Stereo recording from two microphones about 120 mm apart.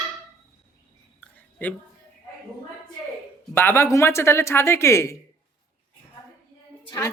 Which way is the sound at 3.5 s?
20° left (ahead or behind).